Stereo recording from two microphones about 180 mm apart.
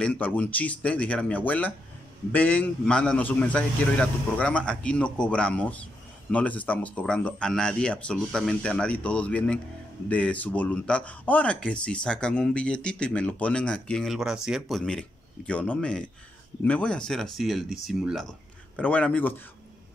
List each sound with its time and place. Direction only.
0.0 s speech: 5° left (ahead or behind)